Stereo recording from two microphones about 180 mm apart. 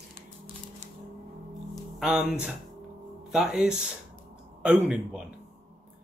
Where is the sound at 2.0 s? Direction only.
5° right (ahead or behind).